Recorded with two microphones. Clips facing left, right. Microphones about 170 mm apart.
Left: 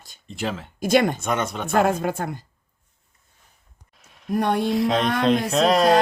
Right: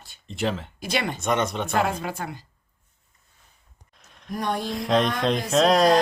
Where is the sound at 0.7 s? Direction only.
45° left (ahead or behind).